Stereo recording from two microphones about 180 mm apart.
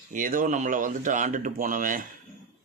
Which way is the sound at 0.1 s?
50° right (ahead or behind).